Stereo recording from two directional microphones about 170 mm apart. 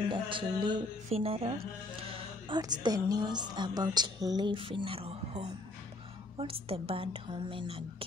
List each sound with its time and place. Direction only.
0.1 s a woman's voice: 30° right (ahead or behind)